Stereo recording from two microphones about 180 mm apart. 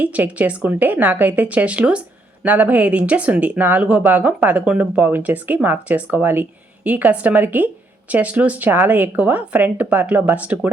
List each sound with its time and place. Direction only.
0.0 s speech: 10° right (ahead or behind)